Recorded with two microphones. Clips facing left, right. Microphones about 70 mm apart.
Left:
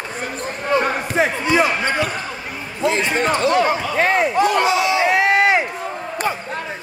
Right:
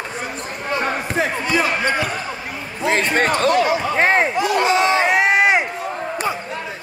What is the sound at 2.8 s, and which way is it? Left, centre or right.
Speech, right.